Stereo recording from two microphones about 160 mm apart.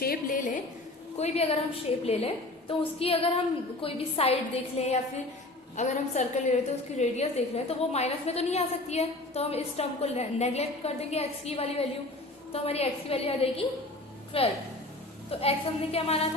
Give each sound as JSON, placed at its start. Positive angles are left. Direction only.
{"t": 0.0, "sound": "a woman's voice", "side_deg": 65}
{"t": 1.1, "sound": "a woman's voice", "side_deg": 40}